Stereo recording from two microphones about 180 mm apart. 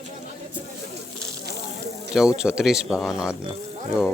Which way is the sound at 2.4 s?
5° right (ahead or behind).